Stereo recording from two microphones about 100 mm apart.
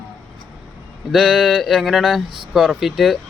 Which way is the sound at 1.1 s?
5° right (ahead or behind).